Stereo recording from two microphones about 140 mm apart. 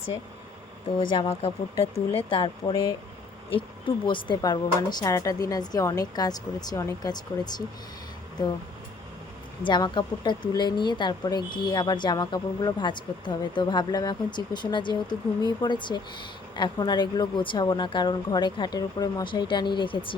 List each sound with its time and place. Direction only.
0.9 s speech: 40° left (ahead or behind)
9.6 s speech: 35° left (ahead or behind)